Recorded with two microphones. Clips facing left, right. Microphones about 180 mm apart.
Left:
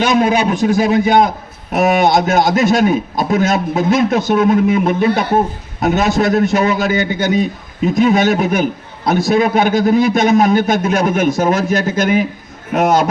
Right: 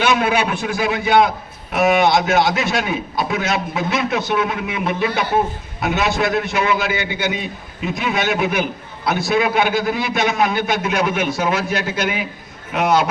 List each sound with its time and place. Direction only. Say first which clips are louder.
0.0 s a man's voice: left 4 dB; 35° left (ahead or behind)